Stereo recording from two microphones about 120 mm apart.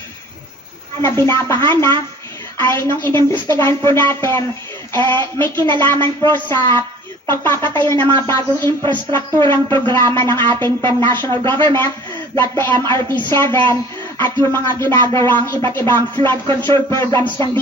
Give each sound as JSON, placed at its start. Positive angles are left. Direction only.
{"t": 1.0, "sound": "speech", "side_deg": 20}